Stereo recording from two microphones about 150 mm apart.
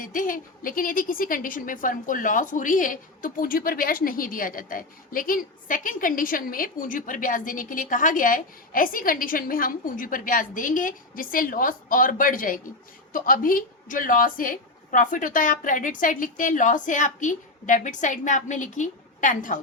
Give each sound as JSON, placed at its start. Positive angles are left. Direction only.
{"t": 0.0, "sound": "a woman's voice", "side_deg": 65}